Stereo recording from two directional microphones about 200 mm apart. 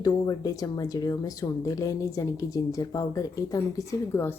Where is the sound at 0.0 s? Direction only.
20° left (ahead or behind).